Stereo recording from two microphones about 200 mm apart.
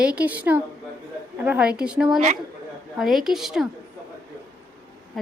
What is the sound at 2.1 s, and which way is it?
Speech, 40° right (ahead or behind).